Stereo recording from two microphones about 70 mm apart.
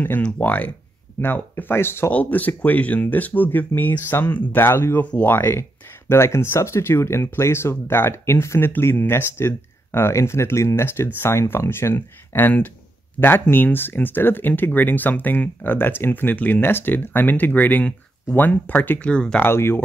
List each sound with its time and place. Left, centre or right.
0.2 s speech: left
2.1 s speech: left
4.6 s speech: left; by 19.4 s centre
19.4 s speech: left